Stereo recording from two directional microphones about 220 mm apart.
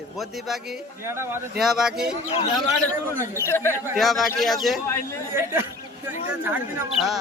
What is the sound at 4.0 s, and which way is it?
Speech, centre (ahead or behind).